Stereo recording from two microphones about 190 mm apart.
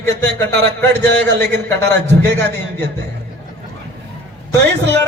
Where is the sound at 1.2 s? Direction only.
60° right (ahead or behind).